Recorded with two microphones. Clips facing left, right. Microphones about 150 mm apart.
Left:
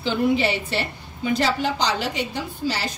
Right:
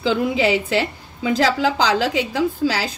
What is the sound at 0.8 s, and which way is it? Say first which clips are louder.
A woman's voice: right 4 dB; 90° right.